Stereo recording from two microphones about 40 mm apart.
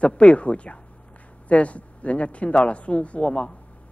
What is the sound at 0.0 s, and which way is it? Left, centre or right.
Speech, left.